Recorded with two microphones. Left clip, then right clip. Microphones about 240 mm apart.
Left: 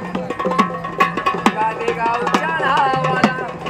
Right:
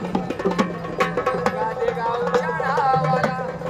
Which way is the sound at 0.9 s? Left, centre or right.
Left.